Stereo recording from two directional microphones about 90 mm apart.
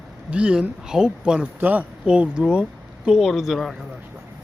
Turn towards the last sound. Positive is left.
turn(degrees=0)  # may be behind; listen again after turning